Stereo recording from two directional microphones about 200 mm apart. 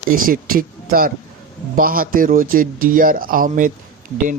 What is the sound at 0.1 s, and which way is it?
Speech, 45° right (ahead or behind).